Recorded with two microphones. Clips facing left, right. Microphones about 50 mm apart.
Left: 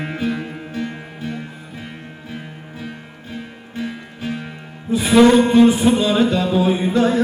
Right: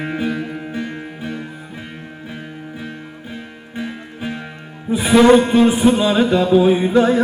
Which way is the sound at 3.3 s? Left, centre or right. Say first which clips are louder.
Left 3 dB; centre.